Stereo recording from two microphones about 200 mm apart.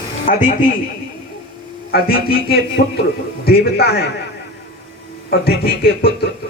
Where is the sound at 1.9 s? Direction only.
50° left (ahead or behind).